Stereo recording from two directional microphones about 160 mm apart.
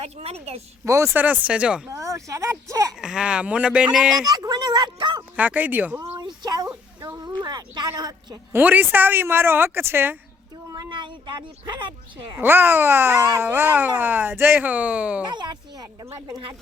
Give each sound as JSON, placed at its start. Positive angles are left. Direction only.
{"t": 0.0, "sound": "a woman's voice", "side_deg": -40}
{"t": 0.9, "sound": "speech", "side_deg": -15}
{"t": 1.9, "sound": "speech", "side_deg": -20}
{"t": 2.9, "sound": "speech", "side_deg": -5}
{"t": 4.3, "sound": "speech", "side_deg": -25}
{"t": 5.4, "sound": "speech", "side_deg": -10}
{"t": 6.1, "sound": "a sound", "side_deg": -25}
{"t": 7.9, "sound": "speech", "side_deg": -25}
{"t": 8.6, "sound": "speech", "side_deg": -10}
{"t": 10.7, "sound": "speech", "side_deg": -25}
{"t": 12.4, "sound": "speech", "side_deg": -15}
{"t": 15.3, "sound": "speech", "side_deg": -30}